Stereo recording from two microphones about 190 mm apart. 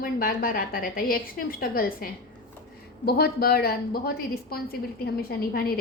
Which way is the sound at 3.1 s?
55° left (ahead or behind).